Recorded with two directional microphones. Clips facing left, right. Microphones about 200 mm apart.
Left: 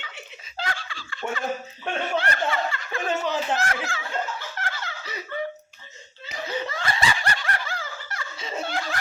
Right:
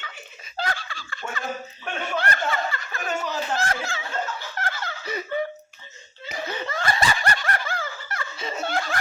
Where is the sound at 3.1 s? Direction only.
20° left (ahead or behind).